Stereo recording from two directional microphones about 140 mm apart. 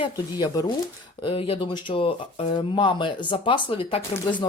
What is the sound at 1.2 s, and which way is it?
Speech, 40° left (ahead or behind).